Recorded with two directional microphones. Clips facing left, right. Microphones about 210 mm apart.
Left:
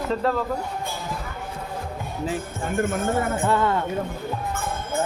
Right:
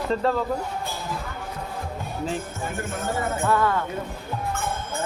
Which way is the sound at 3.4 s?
25° left (ahead or behind).